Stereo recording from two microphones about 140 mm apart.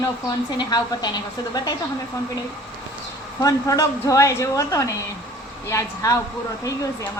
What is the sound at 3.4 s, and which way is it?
Speech, 25° left (ahead or behind).